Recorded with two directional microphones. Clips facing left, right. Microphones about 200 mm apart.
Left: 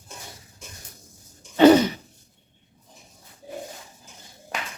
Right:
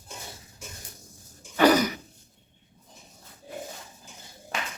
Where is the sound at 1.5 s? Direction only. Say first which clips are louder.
Left 6 dB; 25° left (ahead or behind).